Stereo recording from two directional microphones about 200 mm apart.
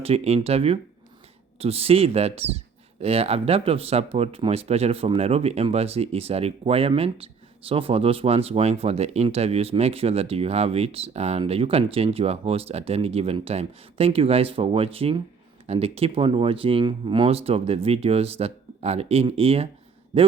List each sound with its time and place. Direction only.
0.0 s speech: 30° right (ahead or behind)